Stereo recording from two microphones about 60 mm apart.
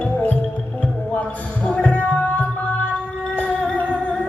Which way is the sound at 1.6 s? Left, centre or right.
Left.